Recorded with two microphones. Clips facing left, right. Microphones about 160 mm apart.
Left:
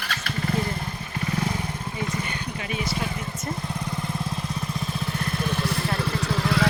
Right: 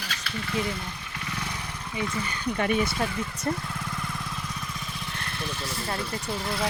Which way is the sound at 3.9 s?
25° left (ahead or behind).